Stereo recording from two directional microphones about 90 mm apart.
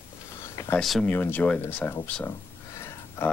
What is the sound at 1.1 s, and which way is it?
Speech, 20° left (ahead or behind).